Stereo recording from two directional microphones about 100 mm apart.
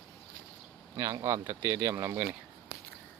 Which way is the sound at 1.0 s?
35° right (ahead or behind).